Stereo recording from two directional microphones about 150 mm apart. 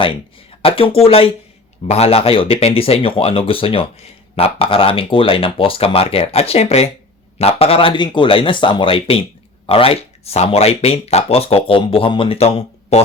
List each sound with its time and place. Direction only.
0.6 s speech: 40° left (ahead or behind)